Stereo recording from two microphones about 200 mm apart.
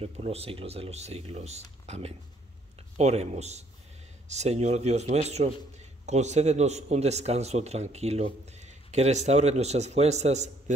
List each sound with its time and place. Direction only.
0.0 s a man's voice: 30° right (ahead or behind)